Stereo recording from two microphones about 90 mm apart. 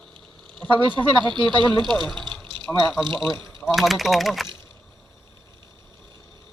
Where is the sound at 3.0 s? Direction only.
65° right (ahead or behind).